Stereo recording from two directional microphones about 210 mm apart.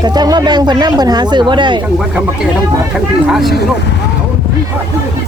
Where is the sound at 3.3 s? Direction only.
Centre (ahead or behind).